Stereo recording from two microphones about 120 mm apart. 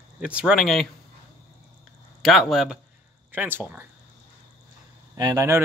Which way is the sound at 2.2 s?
Centre (ahead or behind).